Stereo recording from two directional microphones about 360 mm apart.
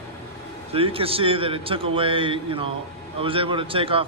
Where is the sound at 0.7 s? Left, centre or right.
Centre.